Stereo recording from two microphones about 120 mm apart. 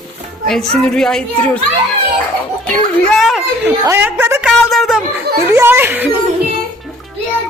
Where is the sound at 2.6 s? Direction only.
10° left (ahead or behind).